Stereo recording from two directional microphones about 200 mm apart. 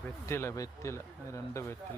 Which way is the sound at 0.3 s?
15° left (ahead or behind).